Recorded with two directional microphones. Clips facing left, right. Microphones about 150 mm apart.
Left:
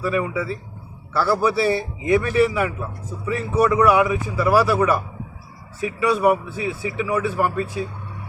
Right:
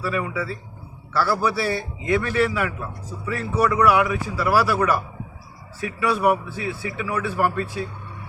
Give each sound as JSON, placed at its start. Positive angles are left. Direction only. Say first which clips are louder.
{"t": 0.0, "sound": "a man's voice", "louder": "left 3 dB", "side_deg": 20}